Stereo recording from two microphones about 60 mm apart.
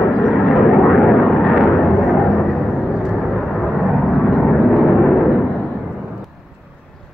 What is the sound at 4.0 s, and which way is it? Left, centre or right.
Vehicle, centre.